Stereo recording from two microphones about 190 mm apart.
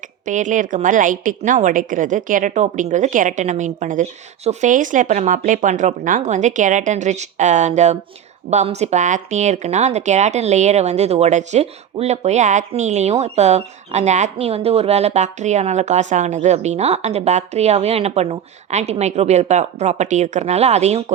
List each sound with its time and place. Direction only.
0.3 s a woman's voice: 40° right (ahead or behind)